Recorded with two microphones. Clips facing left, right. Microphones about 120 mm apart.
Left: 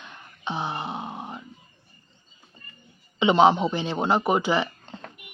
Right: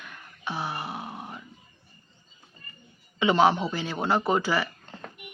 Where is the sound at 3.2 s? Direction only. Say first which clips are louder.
Left 3 dB; 20° left (ahead or behind).